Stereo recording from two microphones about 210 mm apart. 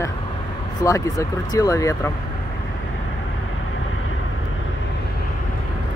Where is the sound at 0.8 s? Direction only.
15° left (ahead or behind).